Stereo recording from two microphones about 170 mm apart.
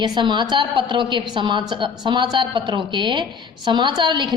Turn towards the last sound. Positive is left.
turn(degrees=-25)  # may be behind; listen again after turning